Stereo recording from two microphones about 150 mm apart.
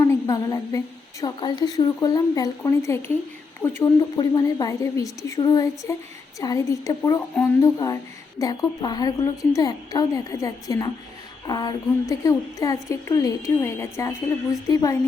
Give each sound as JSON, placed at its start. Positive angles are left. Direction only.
{"t": 0.0, "sound": "a sound", "side_deg": 20}
{"t": 1.2, "sound": "a woman's voice", "side_deg": 25}
{"t": 4.2, "sound": "a woman's voice", "side_deg": 30}